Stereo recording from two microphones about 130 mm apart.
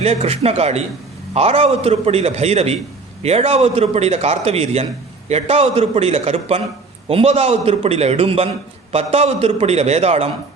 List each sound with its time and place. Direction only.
0.0 s a man's voice: 55° right (ahead or behind)